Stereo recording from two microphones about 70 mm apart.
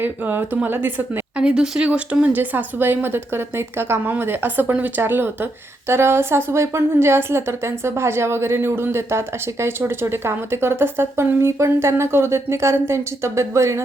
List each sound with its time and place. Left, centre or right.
0.0 s speech: right
1.4 s a woman's voice: centre; by 13.8 s right